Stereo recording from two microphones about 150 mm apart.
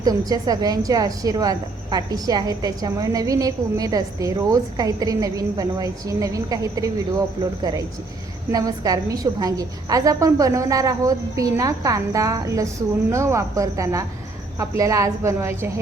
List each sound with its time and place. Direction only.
0.0 s a woman's voice: 25° right (ahead or behind)